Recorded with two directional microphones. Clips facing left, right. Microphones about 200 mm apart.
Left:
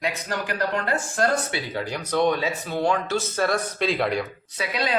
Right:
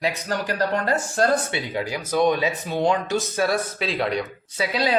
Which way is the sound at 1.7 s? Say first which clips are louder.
Right 2 dB; 10° right (ahead or behind).